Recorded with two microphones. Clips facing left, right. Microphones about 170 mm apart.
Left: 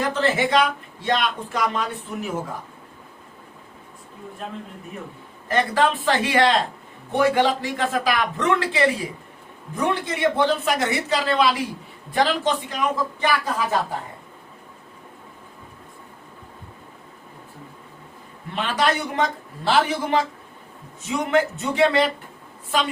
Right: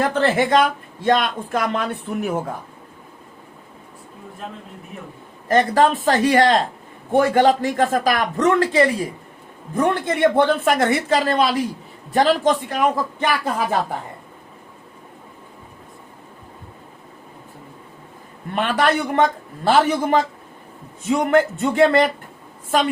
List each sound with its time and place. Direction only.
0.0 s speech: 55° right (ahead or behind)
5.5 s speech: 45° right (ahead or behind)
18.5 s speech: 55° right (ahead or behind)